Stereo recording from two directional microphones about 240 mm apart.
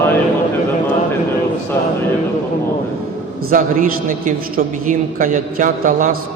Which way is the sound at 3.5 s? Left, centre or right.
Right.